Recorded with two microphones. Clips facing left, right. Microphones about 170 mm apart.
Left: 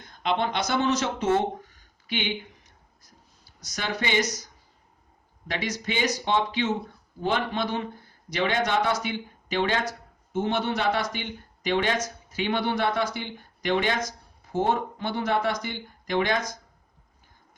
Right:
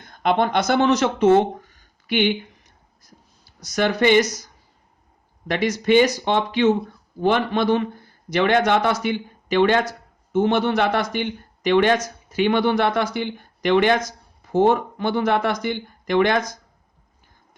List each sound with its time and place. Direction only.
0.2 s speech: 55° right (ahead or behind)
3.8 s speech: 65° right (ahead or behind)
5.5 s speech: 60° right (ahead or behind)
14.5 s speech: 80° right